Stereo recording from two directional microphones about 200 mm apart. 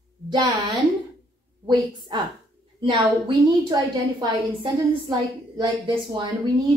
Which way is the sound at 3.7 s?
20° right (ahead or behind).